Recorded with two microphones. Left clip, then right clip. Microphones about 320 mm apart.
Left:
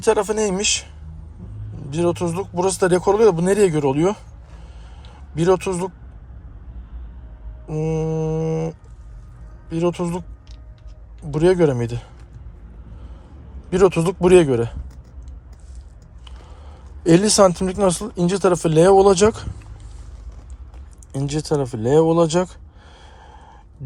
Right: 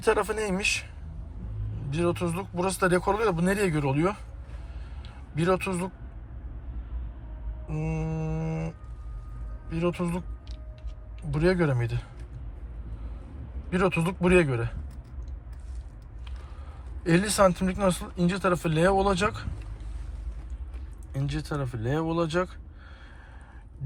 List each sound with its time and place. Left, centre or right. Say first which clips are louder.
0.0 s speech: left 7 dB; centre
1.9 s speech: left 7 dB; left
5.3 s speech: left 8 dB; left
7.7 s speech: left 12 dB; left
11.3 s speech: left 9 dB; left
13.7 s speech: left 10 dB; left
17.0 s speech: left 9 dB; left
21.1 s speech: left 12 dB; left